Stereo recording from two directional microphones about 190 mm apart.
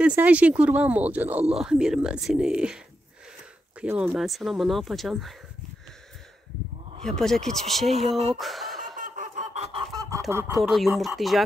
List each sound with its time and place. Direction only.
0.0 s speech: 10° right (ahead or behind)
3.8 s speech: 5° right (ahead or behind)
7.1 s speech: centre (ahead or behind)
8.4 s chuckle: centre (ahead or behind)
8.9 s fowl: 45° right (ahead or behind)
9.9 s goose: 20° right (ahead or behind)
10.5 s speech: centre (ahead or behind)